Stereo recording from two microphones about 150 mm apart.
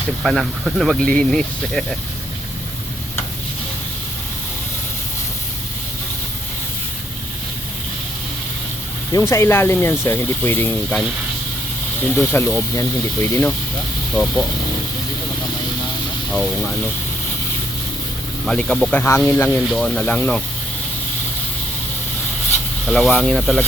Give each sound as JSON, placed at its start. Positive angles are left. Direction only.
{"t": 0.2, "sound": "speech", "side_deg": 0}
{"t": 9.1, "sound": "speech", "side_deg": 20}
{"t": 12.0, "sound": "speech", "side_deg": 15}
{"t": 14.2, "sound": "speech", "side_deg": 5}
{"t": 16.3, "sound": "speech", "side_deg": 5}
{"t": 18.4, "sound": "speech", "side_deg": 5}
{"t": 22.9, "sound": "speech", "side_deg": 10}